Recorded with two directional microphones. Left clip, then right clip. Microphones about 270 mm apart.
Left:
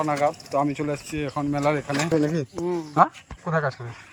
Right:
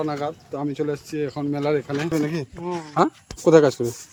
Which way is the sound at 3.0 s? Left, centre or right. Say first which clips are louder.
Even; right.